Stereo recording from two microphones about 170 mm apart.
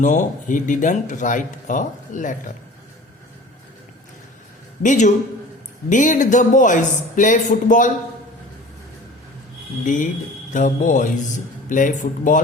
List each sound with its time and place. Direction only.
0.0 s speech: 45° left (ahead or behind)
4.8 s speech: 45° left (ahead or behind)
9.8 s speech: 50° left (ahead or behind)